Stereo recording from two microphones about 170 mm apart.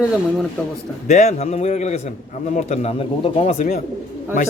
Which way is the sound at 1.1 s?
40° left (ahead or behind).